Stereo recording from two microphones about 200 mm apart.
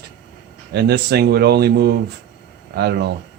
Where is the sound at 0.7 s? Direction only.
55° right (ahead or behind).